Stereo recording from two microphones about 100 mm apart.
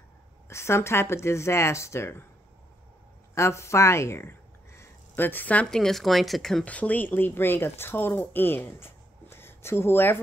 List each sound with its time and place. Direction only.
0.5 s speech: 25° left (ahead or behind)
3.3 s speech: 30° left (ahead or behind); by 6.6 s centre (ahead or behind)
6.6 s speech: 15° left (ahead or behind)